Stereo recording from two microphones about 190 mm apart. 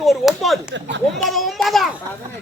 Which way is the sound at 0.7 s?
70° right (ahead or behind).